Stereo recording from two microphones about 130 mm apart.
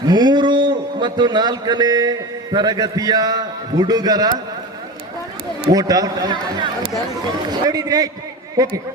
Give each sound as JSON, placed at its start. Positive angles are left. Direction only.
{"t": 0.0, "sound": "a man's voice", "side_deg": -35}
{"t": 5.7, "sound": "a man's voice", "side_deg": -30}